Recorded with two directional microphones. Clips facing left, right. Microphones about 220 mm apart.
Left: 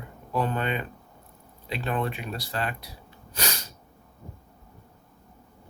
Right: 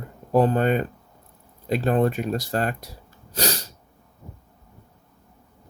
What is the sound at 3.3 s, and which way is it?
Sneeze, 40° right (ahead or behind).